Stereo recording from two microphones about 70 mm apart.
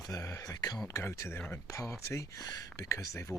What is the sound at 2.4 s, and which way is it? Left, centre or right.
Speech, left.